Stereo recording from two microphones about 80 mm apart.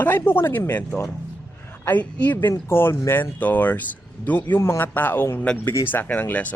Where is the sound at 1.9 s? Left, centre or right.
Left.